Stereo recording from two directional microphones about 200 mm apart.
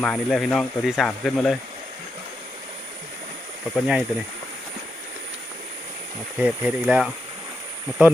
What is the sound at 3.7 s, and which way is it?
Speech, 5° right (ahead or behind).